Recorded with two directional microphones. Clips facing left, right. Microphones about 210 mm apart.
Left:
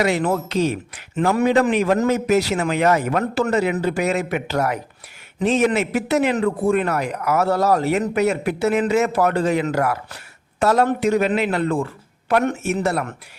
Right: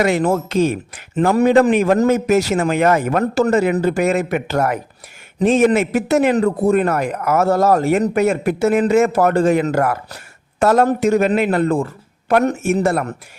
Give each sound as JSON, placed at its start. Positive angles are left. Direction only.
{"t": 0.0, "sound": "a man's voice", "side_deg": -45}